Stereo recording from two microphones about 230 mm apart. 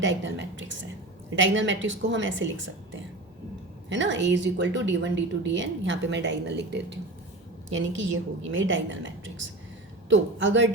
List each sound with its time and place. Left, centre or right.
0.0 s a woman's voice: right